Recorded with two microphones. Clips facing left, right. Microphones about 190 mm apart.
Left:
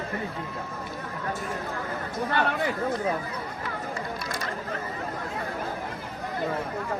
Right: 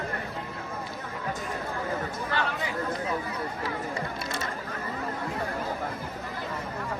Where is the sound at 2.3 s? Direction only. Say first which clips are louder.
Left 5 dB; 55° left (ahead or behind).